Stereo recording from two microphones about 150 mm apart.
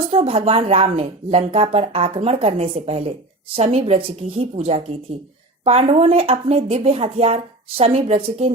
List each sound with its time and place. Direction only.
0.1 s speech: 40° right (ahead or behind)